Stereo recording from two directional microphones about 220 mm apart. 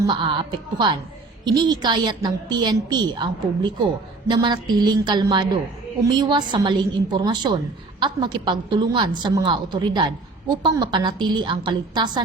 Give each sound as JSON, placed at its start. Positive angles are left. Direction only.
{"t": 0.0, "sound": "a woman's voice", "side_deg": -20}